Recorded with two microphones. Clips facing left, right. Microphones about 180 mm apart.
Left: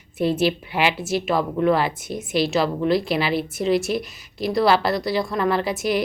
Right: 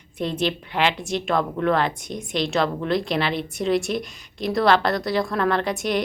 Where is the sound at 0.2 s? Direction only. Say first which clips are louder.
Left 4 dB; 5° left (ahead or behind).